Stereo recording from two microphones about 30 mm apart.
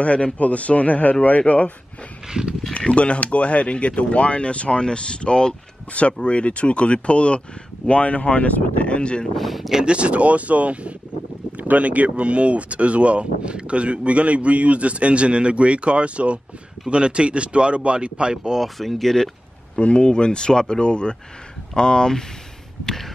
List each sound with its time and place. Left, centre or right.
0.0 s a man's voice: left
2.9 s speech: left
6.2 s speech: left
9.4 s speech: centre
9.8 s speech: right
11.5 s speech: right
18.3 s speech: right
18.8 s speech: centre
19.8 s speech: left
20.1 s speech: left
22.8 s a sound: centre